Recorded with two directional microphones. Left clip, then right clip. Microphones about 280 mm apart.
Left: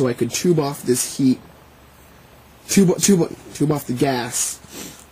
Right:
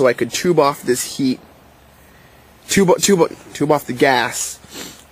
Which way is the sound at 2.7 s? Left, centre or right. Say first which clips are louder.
Right 4 dB; centre.